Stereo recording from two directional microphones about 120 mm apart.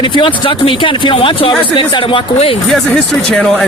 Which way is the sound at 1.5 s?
35° left (ahead or behind).